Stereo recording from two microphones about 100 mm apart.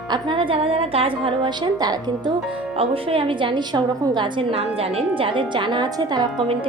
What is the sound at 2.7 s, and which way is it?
A woman's voice, 70° right (ahead or behind).